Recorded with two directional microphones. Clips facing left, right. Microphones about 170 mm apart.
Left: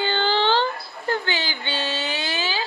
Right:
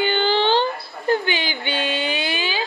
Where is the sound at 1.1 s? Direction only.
15° right (ahead or behind).